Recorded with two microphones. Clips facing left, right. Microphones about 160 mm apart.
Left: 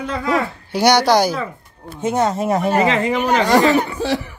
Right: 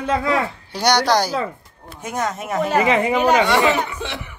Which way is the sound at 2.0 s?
30° left (ahead or behind).